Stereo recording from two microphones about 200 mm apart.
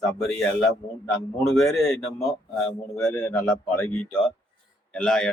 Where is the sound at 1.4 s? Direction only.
Centre (ahead or behind).